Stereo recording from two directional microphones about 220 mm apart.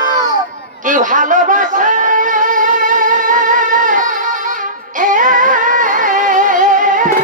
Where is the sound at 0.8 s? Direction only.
35° right (ahead or behind).